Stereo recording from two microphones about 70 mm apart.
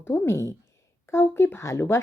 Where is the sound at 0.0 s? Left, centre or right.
Left.